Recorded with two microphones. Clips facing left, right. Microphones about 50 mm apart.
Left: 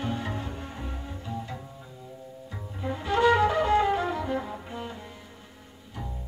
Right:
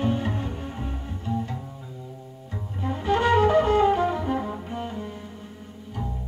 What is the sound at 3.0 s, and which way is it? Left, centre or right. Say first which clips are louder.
Music: right 2 dB; right.